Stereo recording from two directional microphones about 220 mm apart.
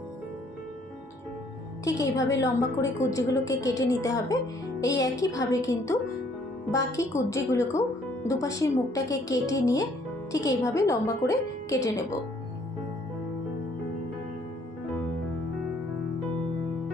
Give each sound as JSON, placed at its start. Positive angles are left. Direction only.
{"t": 1.8, "sound": "speech", "side_deg": 15}